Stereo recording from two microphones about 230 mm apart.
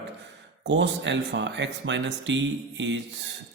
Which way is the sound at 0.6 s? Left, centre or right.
Right.